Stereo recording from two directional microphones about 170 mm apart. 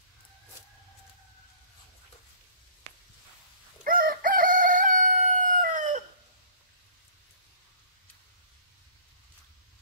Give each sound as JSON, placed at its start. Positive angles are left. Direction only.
{"t": 3.8, "sound": "crowing", "side_deg": -55}